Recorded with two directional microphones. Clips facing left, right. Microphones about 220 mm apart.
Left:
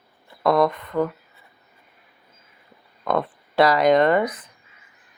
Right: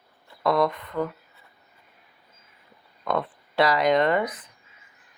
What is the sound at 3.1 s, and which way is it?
Speech, 45° left (ahead or behind).